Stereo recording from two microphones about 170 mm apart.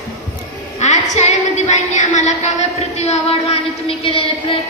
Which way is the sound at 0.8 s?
45° left (ahead or behind).